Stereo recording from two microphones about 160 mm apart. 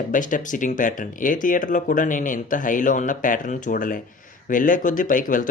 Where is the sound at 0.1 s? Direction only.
55° left (ahead or behind).